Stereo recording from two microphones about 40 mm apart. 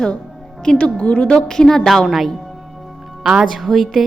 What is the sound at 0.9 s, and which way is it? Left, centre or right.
Speech, left.